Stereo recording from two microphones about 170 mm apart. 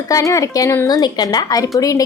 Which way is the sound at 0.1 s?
20° left (ahead or behind).